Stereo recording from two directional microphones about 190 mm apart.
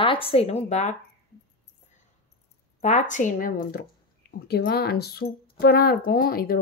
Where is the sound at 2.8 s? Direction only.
40° left (ahead or behind).